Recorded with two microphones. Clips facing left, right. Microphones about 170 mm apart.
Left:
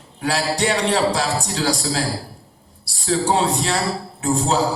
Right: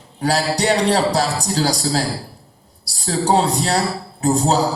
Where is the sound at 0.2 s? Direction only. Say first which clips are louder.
Right 2 dB; 40° right (ahead or behind).